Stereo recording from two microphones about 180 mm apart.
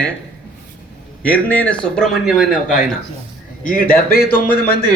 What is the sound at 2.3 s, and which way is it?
Speech, 50° left (ahead or behind).